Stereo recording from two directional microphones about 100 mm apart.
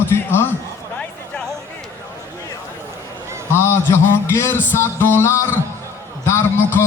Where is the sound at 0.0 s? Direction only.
20° left (ahead or behind).